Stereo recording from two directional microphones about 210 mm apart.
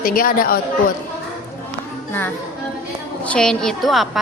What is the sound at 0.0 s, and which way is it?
Speech, 45° left (ahead or behind).